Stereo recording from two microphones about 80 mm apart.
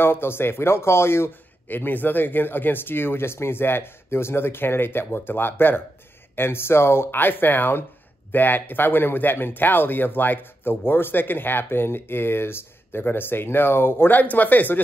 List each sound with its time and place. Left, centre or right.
0.0 s speech: left